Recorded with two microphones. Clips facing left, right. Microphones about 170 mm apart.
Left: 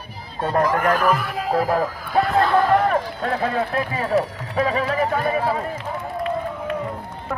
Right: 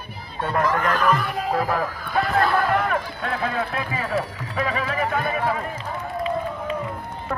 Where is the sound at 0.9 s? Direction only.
5° left (ahead or behind).